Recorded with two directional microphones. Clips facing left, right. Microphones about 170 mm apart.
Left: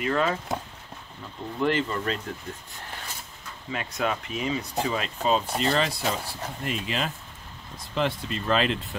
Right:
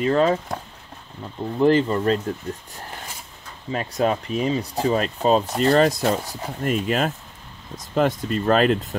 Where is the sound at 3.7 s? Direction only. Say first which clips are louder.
Right 7 dB; 35° right (ahead or behind).